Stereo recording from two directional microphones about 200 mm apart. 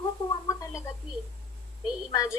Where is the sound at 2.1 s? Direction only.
15° left (ahead or behind).